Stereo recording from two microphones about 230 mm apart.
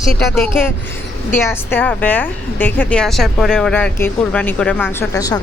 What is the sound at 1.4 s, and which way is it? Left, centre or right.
A woman's voice, centre.